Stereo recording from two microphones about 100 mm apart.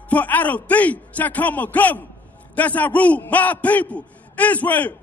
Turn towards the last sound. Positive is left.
turn(degrees=15)  # may be behind; listen again after turning